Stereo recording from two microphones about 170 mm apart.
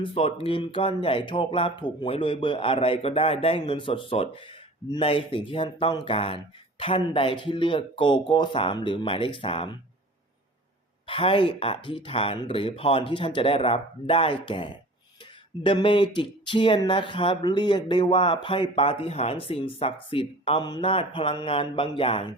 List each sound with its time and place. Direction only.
0.0 s speech: 35° left (ahead or behind)
11.0 s speech: 30° left (ahead or behind)